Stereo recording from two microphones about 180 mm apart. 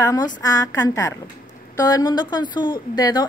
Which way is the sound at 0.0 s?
20° left (ahead or behind).